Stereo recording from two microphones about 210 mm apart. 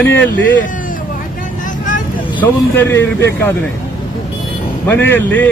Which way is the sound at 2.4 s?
10° left (ahead or behind).